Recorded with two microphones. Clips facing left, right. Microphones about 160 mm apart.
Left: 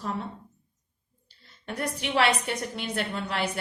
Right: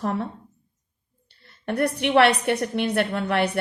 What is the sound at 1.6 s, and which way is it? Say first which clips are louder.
A woman's voice: right 9 dB; 65° right (ahead or behind).